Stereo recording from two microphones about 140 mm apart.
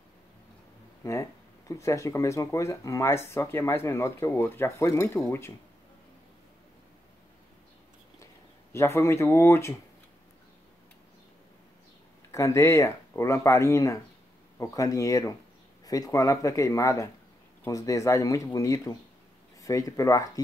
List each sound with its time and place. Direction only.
1.0 s speech: 25° left (ahead or behind)
8.7 s speech: 20° left (ahead or behind)
12.3 s speech: 20° left (ahead or behind)